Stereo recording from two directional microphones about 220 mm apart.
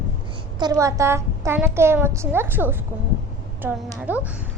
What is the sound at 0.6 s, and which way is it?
A woman's voice, 15° right (ahead or behind).